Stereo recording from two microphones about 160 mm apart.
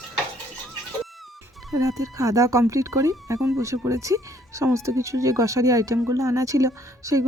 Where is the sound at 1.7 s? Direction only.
20° right (ahead or behind).